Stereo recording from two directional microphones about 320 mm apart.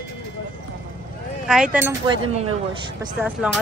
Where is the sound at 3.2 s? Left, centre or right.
Centre.